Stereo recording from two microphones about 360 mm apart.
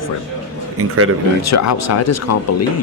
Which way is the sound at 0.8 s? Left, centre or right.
Right.